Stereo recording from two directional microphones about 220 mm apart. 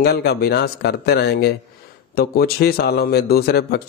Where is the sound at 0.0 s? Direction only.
45° left (ahead or behind).